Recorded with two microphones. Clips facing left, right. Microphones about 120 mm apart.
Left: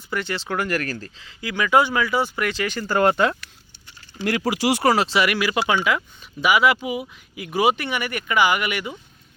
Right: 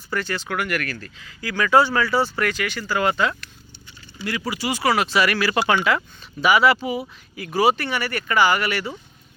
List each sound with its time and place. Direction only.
0.1 s speech: 20° left (ahead or behind)
2.9 s speech: 50° left (ahead or behind)
4.3 s speech: 75° left (ahead or behind)
4.9 s speech: 25° left (ahead or behind)
5.5 s speech: 5° left (ahead or behind)